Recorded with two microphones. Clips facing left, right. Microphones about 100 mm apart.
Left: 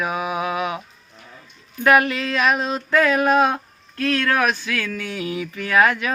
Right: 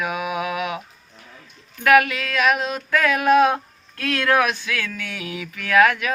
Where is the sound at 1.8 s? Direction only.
35° left (ahead or behind).